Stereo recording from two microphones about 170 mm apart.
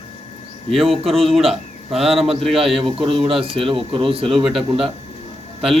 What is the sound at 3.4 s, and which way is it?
Speech, 35° right (ahead or behind).